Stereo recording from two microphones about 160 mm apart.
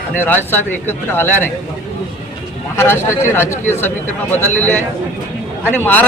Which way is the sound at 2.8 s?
15° left (ahead or behind).